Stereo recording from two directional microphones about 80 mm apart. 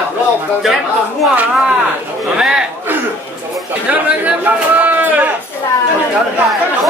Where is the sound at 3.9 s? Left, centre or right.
Centre.